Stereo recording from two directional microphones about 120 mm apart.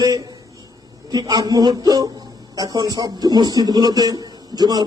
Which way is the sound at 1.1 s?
35° right (ahead or behind).